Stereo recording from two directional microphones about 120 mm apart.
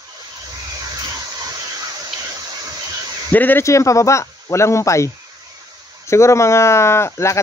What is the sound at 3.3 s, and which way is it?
Speech, 15° left (ahead or behind).